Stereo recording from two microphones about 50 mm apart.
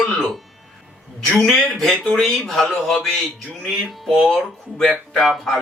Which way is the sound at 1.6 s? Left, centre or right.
Centre.